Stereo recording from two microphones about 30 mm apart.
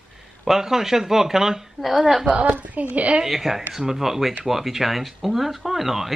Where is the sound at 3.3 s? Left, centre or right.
Centre.